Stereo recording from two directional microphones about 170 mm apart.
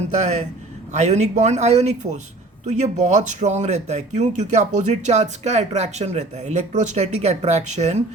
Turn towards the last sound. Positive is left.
turn(degrees=-40)  # may be behind; listen again after turning